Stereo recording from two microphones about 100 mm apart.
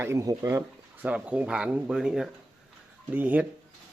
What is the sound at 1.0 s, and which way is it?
Speech, 15° right (ahead or behind).